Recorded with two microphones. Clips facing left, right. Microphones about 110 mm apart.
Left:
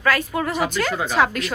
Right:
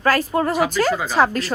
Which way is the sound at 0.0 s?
35° right (ahead or behind).